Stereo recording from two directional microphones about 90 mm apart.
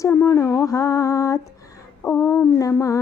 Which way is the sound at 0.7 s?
40° left (ahead or behind).